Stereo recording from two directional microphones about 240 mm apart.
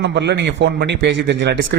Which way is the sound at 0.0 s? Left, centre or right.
Right.